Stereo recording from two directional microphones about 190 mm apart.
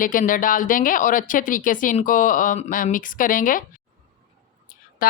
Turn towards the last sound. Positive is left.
turn(degrees=50)  # may be behind; listen again after turning